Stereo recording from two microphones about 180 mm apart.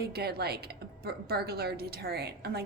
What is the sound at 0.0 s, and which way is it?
A woman's voice, 60° right (ahead or behind).